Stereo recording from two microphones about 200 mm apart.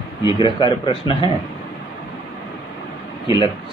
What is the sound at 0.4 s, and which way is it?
Speech, 20° left (ahead or behind).